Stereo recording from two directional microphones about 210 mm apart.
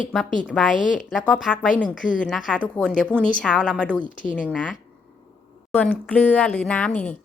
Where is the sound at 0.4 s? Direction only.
Centre (ahead or behind).